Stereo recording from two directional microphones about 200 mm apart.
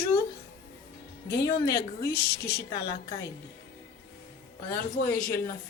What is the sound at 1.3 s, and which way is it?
Speech, 15° left (ahead or behind).